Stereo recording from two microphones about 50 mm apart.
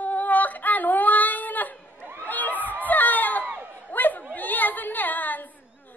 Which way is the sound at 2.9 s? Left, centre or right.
Left.